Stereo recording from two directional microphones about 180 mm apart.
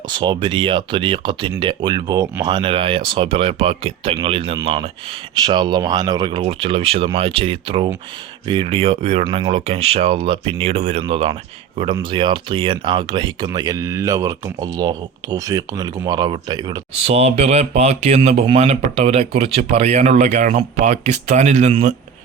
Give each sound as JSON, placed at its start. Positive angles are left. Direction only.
{"t": 0.1, "sound": "speech", "side_deg": -25}
{"t": 16.9, "sound": "speech", "side_deg": -35}